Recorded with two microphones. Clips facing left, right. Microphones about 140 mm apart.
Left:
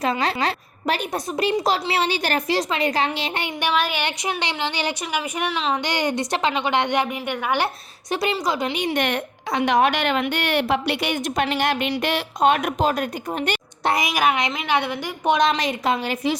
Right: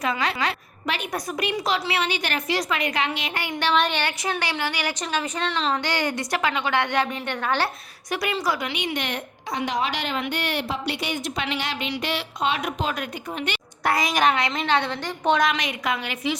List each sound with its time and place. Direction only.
0.0 s a woman's voice: 30° left (ahead or behind)
3.8 s a woman's voice: 5° left (ahead or behind)
4.0 s a woman's voice: 20° left (ahead or behind)
4.9 s a woman's voice: 10° left (ahead or behind)
5.8 s a woman's voice: 15° left (ahead or behind)
8.1 s a woman's voice: 25° left (ahead or behind)
8.7 s a woman's voice: 35° left (ahead or behind)
9.0 s a woman's voice: 60° left (ahead or behind); by 13.6 s 40° left (ahead or behind)
13.8 s a woman's voice: 15° left (ahead or behind)
15.4 s a woman's voice: 30° left (ahead or behind)